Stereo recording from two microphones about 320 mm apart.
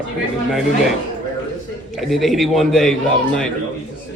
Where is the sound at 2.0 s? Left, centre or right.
Centre.